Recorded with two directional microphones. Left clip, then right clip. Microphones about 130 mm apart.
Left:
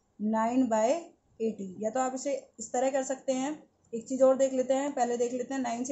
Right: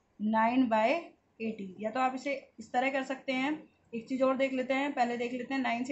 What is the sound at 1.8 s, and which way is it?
A woman's voice, 75° left (ahead or behind).